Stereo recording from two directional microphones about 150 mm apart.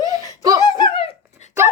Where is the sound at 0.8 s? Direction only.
35° left (ahead or behind).